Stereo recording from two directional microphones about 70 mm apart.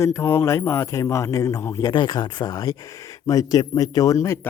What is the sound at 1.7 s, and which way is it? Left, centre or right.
Speech, left.